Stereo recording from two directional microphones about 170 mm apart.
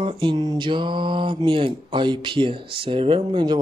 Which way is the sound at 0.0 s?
30° right (ahead or behind).